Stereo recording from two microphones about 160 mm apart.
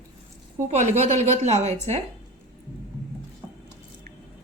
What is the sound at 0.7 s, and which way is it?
Speech, 45° right (ahead or behind).